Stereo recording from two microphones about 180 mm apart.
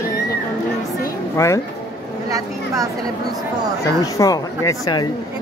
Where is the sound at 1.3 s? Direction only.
15° left (ahead or behind).